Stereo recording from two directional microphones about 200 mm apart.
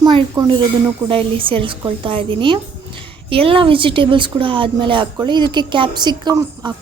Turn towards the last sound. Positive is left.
turn(degrees=-20)  # may be behind; listen again after turning